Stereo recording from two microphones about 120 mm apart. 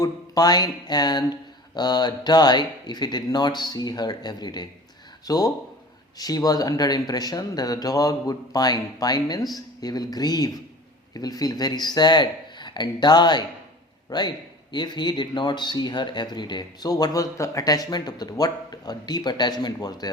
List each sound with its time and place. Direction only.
0.0 s speech: 35° left (ahead or behind)